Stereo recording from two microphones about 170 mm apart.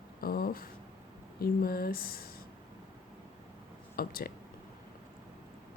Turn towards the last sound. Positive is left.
turn(degrees=60)  # may be behind; listen again after turning